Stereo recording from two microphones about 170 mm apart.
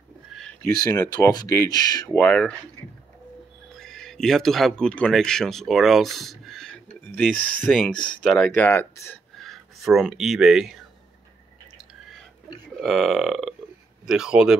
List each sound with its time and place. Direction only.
0.3 s a sound: 5° left (ahead or behind)
1.1 s speech: 25° left (ahead or behind)
2.1 s speech: 5° left (ahead or behind)
3.7 s speech: 5° left (ahead or behind)
9.4 s speech: centre (ahead or behind)
11.9 s burping: centre (ahead or behind)
14.0 s speech: 5° right (ahead or behind)